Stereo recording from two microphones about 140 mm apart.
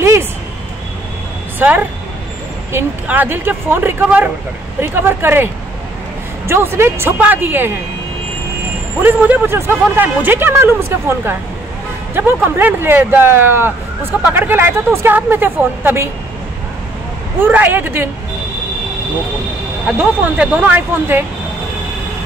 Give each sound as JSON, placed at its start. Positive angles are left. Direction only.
{"t": 0.0, "sound": "a sound", "side_deg": -20}
{"t": 1.6, "sound": "speech", "side_deg": -10}
{"t": 9.0, "sound": "speech", "side_deg": -15}
{"t": 17.4, "sound": "speech", "side_deg": -10}
{"t": 20.0, "sound": "speech", "side_deg": -10}